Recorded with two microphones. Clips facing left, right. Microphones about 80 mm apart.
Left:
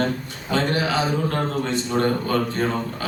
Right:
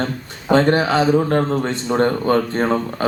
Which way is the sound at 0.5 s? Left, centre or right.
Right.